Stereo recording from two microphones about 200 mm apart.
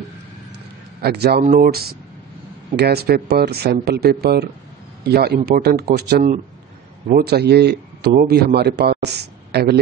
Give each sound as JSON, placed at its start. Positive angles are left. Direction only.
{"t": 1.0, "sound": "speech", "side_deg": -55}
{"t": 1.4, "sound": "a man's voice", "side_deg": -45}